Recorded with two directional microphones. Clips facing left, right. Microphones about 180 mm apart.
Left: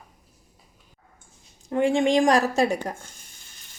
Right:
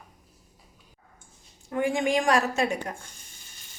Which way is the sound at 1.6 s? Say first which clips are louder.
Left 5 dB; 30° left (ahead or behind).